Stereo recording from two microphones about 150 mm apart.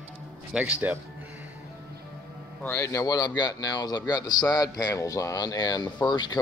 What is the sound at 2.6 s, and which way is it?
Speech, 15° left (ahead or behind).